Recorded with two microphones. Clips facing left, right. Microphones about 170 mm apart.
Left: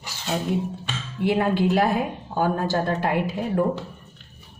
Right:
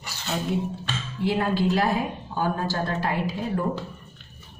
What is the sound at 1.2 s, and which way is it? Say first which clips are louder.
A woman's voice: left 3 dB; 55° left (ahead or behind).